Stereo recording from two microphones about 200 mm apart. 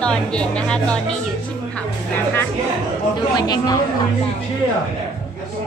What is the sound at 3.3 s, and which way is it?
Speech, 20° left (ahead or behind).